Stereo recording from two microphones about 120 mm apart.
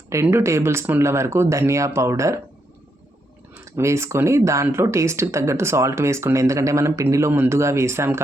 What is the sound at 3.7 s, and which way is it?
Speech, 25° right (ahead or behind).